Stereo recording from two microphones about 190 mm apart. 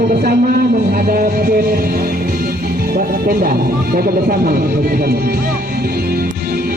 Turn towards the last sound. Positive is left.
turn(degrees=-50)  # may be behind; listen again after turning